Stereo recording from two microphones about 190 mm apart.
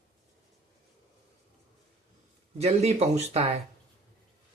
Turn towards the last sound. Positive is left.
turn(degrees=-30)  # may be behind; listen again after turning